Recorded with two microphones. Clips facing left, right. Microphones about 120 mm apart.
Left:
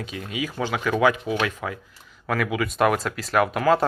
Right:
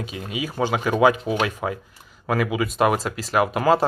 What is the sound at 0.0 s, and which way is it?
Speech, 15° right (ahead or behind).